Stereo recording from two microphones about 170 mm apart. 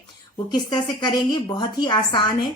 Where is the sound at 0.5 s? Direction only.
25° left (ahead or behind).